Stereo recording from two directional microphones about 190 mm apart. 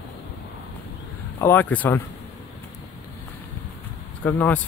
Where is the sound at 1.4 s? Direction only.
10° left (ahead or behind).